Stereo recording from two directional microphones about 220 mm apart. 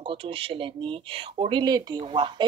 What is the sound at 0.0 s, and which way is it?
Speech, 25° right (ahead or behind).